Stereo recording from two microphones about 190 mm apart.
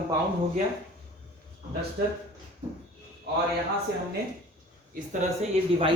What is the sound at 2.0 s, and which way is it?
Speech, 70° right (ahead or behind).